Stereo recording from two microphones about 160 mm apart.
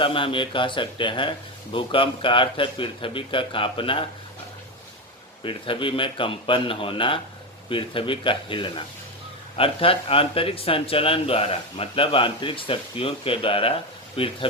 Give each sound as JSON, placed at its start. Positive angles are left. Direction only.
{"t": 0.0, "sound": "speech", "side_deg": 35}
{"t": 5.4, "sound": "speech", "side_deg": 35}